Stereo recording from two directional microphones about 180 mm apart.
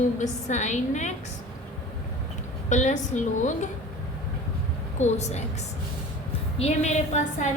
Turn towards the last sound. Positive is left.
turn(degrees=40)  # may be behind; listen again after turning